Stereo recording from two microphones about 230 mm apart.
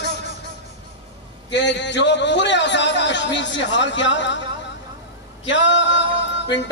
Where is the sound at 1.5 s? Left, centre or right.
Left.